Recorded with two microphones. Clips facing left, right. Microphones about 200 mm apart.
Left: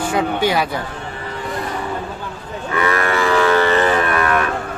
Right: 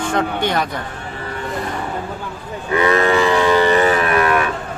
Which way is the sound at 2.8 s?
20° right (ahead or behind).